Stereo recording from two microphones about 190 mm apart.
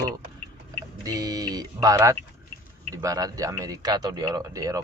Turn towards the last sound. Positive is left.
turn(degrees=-20)  # may be behind; listen again after turning